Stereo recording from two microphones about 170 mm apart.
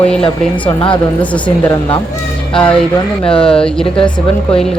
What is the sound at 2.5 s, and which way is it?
Speech, 5° left (ahead or behind).